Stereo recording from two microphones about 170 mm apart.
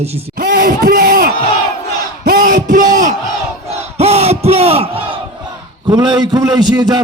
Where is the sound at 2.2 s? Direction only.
55° right (ahead or behind).